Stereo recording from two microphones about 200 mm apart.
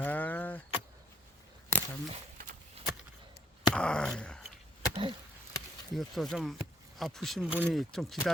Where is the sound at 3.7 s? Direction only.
5° left (ahead or behind).